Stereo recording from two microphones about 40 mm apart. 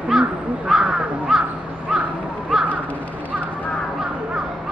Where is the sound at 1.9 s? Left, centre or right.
Centre.